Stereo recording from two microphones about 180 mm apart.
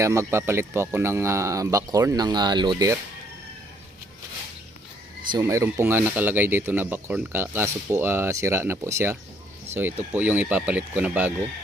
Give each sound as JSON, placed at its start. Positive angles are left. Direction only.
{"t": 0.0, "sound": "speech", "side_deg": -15}
{"t": 5.3, "sound": "speech", "side_deg": -15}